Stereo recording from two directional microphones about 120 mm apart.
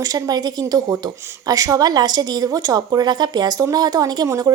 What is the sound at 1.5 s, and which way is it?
A woman's voice, 30° right (ahead or behind).